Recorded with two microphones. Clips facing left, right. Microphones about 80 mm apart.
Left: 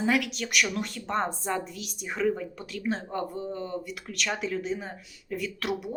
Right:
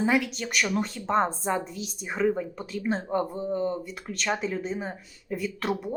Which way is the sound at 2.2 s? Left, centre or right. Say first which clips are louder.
Right 2 dB; centre.